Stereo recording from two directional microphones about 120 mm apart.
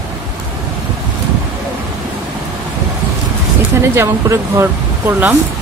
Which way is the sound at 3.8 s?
25° right (ahead or behind).